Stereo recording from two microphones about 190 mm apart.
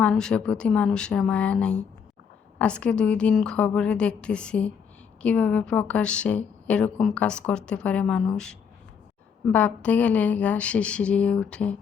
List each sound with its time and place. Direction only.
0.0 s a woman's voice: 5° left (ahead or behind)